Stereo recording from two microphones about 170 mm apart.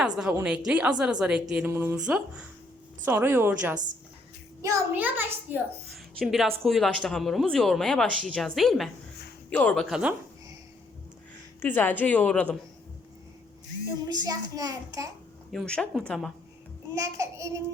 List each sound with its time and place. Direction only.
0.4 s speech: 5° right (ahead or behind)
1.7 s a child's voice: 15° right (ahead or behind)
2.0 s a child's voice: 5° right (ahead or behind)
6.1 s speech: centre (ahead or behind)
11.6 s a woman's voice: 10° left (ahead or behind)
14.1 s a child's voice: 25° right (ahead or behind)
15.5 s speech: 5° left (ahead or behind)
16.9 s a child's voice: 20° right (ahead or behind)